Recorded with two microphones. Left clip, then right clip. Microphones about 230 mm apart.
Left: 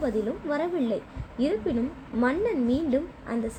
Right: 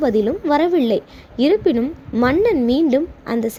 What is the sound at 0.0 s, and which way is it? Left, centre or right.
A woman's voice, right.